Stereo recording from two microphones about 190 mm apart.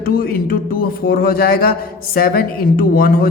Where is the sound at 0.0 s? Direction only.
50° left (ahead or behind).